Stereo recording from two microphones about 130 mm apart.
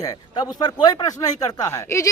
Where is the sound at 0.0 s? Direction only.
30° left (ahead or behind).